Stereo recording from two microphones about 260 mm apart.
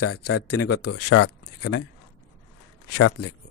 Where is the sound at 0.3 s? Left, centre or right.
Left.